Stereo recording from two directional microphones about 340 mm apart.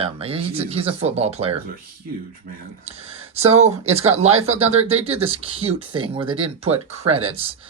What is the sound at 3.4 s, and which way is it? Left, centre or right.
Speech, centre.